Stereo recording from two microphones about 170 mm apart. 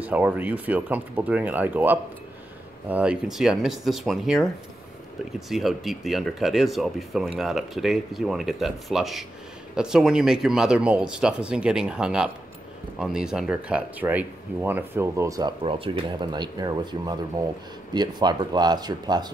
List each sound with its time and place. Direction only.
0.0 s speech: 10° right (ahead or behind)
5.5 s speech: centre (ahead or behind); by 19.3 s 25° right (ahead or behind)